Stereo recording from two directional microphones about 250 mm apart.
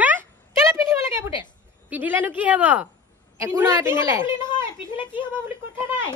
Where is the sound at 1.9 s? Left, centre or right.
Centre.